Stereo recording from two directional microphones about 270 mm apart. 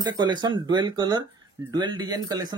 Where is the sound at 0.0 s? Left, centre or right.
Centre.